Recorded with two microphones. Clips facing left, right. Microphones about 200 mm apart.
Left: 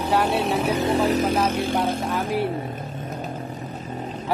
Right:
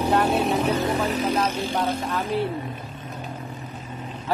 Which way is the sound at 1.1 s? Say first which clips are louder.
Left 3 dB; 45° left (ahead or behind).